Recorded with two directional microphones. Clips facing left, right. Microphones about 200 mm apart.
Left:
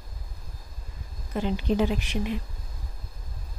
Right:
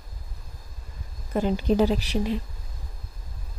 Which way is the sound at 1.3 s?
45° right (ahead or behind).